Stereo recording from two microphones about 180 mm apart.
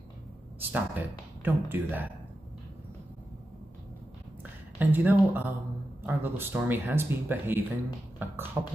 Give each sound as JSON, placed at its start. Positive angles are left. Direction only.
{"t": 0.7, "sound": "speech", "side_deg": -10}
{"t": 4.7, "sound": "speech", "side_deg": -10}
{"t": 8.2, "sound": "beatboxing", "side_deg": -10}
{"t": 8.6, "sound": "speech", "side_deg": -15}